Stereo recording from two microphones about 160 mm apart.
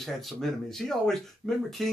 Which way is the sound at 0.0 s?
Centre (ahead or behind).